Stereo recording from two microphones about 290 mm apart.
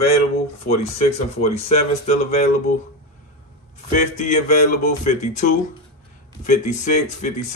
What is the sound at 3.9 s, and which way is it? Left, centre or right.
Speech, left.